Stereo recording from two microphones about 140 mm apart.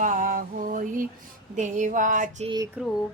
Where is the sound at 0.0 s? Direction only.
70° right (ahead or behind).